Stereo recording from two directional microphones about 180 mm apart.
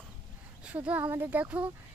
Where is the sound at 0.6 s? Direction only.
5° right (ahead or behind).